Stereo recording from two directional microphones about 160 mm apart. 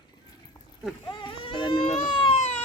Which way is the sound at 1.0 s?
30° left (ahead or behind).